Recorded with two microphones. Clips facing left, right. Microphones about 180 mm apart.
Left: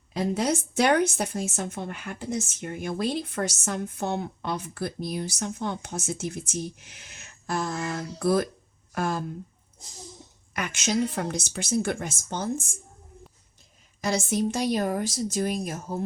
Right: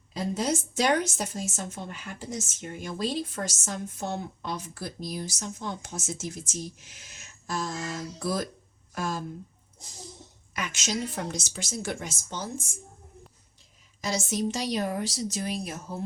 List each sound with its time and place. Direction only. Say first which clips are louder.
0.1 s a woman's voice: left 3 dB; 60° left (ahead or behind)
10.5 s a woman's voice: left 5 dB; 55° left (ahead or behind)
14.0 s a woman's voice: left 3 dB; 55° left (ahead or behind)